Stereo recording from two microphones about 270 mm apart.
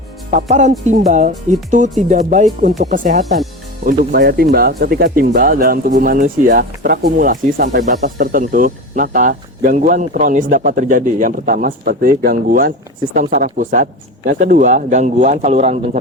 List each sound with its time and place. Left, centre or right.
0.3 s speech: right